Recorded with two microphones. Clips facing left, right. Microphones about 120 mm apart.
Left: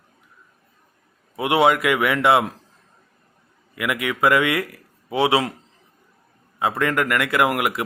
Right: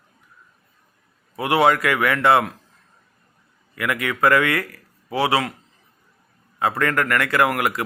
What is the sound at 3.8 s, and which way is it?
Speech, 15° left (ahead or behind).